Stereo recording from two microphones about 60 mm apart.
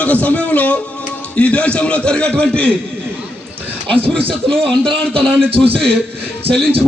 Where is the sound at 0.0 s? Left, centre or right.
Left.